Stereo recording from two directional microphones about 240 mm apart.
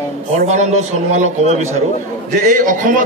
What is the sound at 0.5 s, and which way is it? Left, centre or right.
A man's voice, right.